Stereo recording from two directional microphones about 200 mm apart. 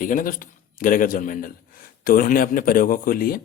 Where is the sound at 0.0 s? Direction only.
45° left (ahead or behind).